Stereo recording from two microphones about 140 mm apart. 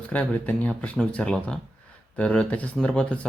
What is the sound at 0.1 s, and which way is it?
Speech, 10° left (ahead or behind).